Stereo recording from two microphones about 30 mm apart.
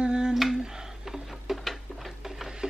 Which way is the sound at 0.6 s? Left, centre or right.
Centre.